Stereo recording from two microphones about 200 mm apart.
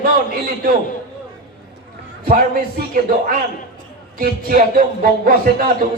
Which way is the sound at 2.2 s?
45° right (ahead or behind).